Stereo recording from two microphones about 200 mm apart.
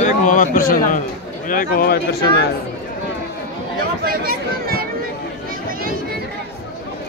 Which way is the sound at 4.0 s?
45° right (ahead or behind).